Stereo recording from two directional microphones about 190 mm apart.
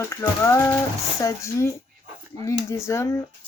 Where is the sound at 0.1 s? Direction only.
15° left (ahead or behind).